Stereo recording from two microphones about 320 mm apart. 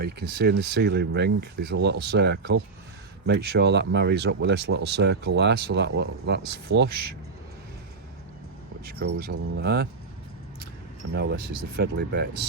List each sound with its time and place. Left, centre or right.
0.0 s speech: right
8.8 s speech: right
11.1 s speech: right